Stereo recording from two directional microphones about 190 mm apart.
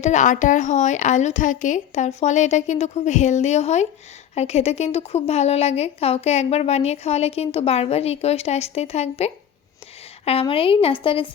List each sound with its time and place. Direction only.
0.0 s a woman's voice: 40° left (ahead or behind)